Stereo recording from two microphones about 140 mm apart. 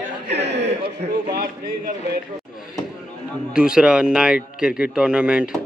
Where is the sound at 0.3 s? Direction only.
50° right (ahead or behind).